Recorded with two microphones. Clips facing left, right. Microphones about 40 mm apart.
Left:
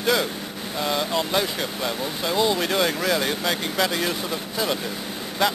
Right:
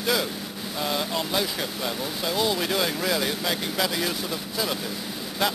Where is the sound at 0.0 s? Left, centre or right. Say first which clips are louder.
Left 3 dB; centre.